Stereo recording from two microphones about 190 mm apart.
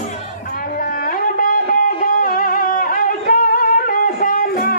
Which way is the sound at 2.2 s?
45° left (ahead or behind).